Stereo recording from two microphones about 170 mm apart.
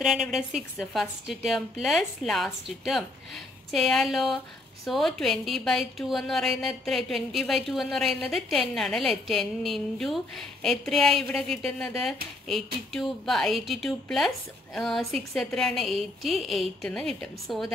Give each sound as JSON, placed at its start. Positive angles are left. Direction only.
{"t": 0.0, "sound": "a woman's voice", "side_deg": 0}